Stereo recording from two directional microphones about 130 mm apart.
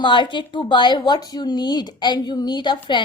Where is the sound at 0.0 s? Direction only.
40° left (ahead or behind).